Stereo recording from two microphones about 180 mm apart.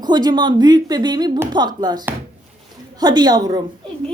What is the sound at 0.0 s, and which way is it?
Speech, 25° right (ahead or behind).